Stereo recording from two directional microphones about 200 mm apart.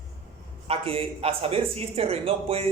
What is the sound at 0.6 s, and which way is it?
Speech, 30° right (ahead or behind).